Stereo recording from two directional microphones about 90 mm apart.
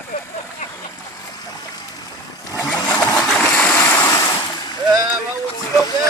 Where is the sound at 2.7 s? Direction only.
50° left (ahead or behind).